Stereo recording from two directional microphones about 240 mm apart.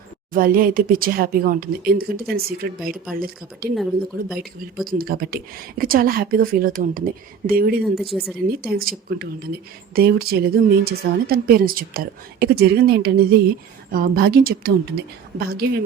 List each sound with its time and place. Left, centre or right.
0.3 s a woman's voice: right
4.9 s a woman's voice: right
7.9 s speech: centre
8.4 s a woman's voice: right